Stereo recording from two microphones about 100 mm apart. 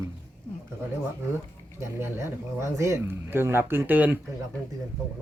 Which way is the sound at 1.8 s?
25° right (ahead or behind).